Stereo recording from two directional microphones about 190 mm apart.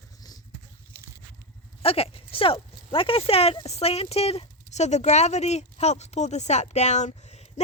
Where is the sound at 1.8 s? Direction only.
30° left (ahead or behind).